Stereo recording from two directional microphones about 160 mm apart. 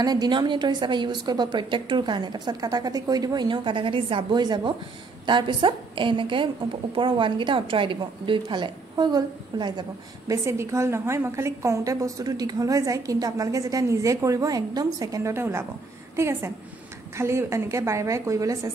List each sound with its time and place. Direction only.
0.0 s a woman's voice: 25° right (ahead or behind)